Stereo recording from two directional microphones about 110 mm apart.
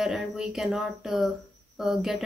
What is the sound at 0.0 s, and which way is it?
A woman's voice, centre (ahead or behind).